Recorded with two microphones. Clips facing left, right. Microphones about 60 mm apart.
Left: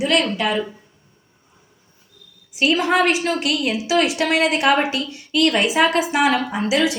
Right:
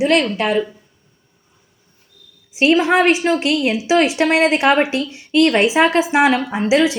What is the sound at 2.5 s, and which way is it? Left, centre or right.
A woman's voice, right.